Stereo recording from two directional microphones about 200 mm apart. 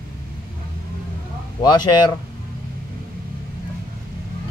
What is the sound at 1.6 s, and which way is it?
Speech, 20° left (ahead or behind).